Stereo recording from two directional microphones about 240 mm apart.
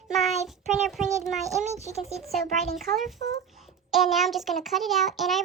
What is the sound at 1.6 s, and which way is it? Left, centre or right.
Speech, right.